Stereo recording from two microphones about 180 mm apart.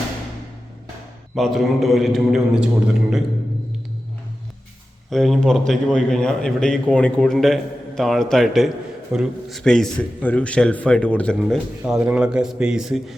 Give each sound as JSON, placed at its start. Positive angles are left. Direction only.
{"t": 1.4, "sound": "a man's voice", "side_deg": 0}
{"t": 5.1, "sound": "a man's voice", "side_deg": 0}